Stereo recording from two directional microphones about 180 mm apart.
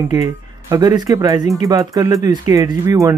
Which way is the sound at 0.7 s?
20° right (ahead or behind).